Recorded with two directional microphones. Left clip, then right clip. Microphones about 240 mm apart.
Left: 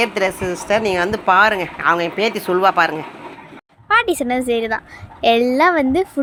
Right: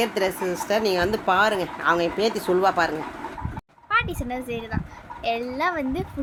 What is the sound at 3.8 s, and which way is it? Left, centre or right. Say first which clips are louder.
Speech: left 8 dB; left.